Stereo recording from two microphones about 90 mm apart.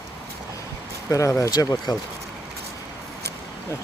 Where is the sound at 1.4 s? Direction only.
45° left (ahead or behind).